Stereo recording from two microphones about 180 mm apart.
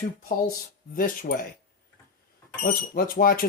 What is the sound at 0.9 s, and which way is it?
Speech, 55° left (ahead or behind).